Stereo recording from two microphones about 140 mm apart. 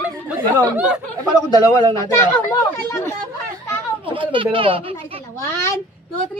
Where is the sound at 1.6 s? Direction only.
25° right (ahead or behind).